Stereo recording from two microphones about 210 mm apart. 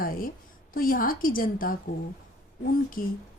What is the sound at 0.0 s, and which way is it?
A woman's voice, 45° left (ahead or behind).